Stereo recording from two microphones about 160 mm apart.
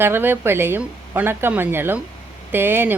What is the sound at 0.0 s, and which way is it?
Speech, 15° right (ahead or behind).